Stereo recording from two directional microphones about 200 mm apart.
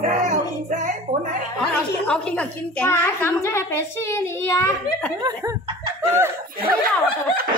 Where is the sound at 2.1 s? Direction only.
5° left (ahead or behind).